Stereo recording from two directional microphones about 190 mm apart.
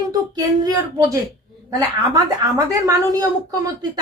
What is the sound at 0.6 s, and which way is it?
A woman's voice, 20° right (ahead or behind).